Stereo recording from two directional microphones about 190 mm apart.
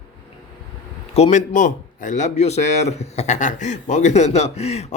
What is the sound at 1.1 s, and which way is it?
Speech, 35° left (ahead or behind).